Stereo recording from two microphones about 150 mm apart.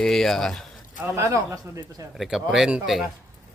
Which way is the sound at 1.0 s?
20° right (ahead or behind).